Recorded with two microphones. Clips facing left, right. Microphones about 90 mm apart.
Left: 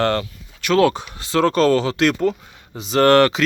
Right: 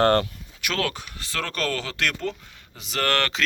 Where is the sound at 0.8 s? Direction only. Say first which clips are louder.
Left 13 dB; 20° left (ahead or behind).